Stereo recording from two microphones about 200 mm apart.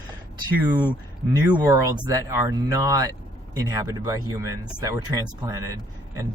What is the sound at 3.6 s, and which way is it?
Speech, 15° right (ahead or behind).